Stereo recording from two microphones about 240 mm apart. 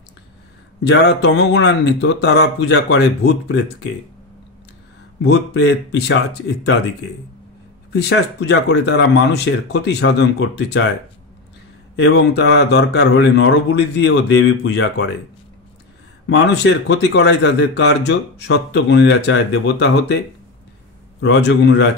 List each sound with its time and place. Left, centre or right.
0.8 s speech: left
5.2 s speech: left
7.9 s speech: left
12.0 s speech: left
16.3 s speech: left
21.2 s speech: left